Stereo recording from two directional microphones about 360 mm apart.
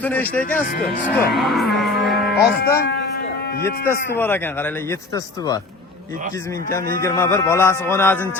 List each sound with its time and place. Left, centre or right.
0.0 s speech: centre
2.3 s speech: left
3.8 s speech: centre
7.0 s speech: centre